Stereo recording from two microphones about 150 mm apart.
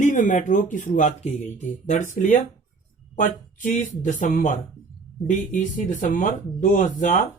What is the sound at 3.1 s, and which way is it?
Speech, 55° left (ahead or behind).